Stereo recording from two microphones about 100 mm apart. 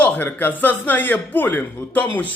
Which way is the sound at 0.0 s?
20° left (ahead or behind).